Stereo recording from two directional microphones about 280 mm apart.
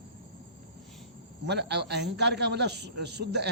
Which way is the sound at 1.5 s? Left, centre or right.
Right.